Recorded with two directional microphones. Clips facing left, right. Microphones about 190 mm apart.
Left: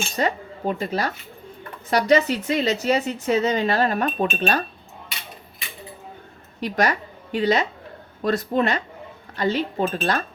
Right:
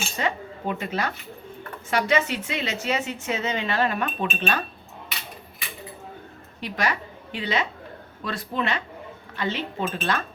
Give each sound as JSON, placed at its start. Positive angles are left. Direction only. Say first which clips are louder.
{"t": 0.2, "sound": "a woman's voice", "louder": "left 4 dB", "side_deg": 40}
{"t": 6.6, "sound": "a woman's voice", "louder": "left 5 dB", "side_deg": 40}